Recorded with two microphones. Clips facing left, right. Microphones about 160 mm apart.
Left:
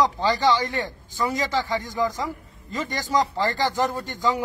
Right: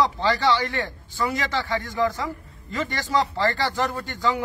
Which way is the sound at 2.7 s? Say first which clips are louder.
Even; 15° left (ahead or behind).